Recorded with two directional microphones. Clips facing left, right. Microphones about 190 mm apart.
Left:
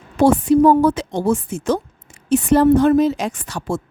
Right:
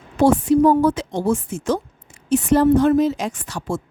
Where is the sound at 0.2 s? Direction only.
65° left (ahead or behind).